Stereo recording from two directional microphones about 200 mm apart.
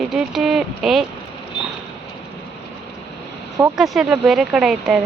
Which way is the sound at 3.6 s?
Centre (ahead or behind).